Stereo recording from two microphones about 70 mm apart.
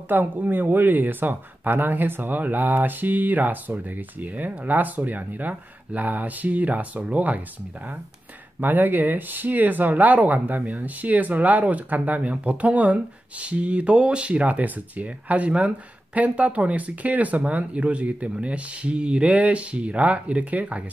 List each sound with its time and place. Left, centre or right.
0.1 s speech: right
8.5 s speech: right